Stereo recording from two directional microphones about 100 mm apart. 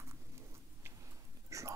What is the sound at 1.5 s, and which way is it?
Whispering, 30° right (ahead or behind).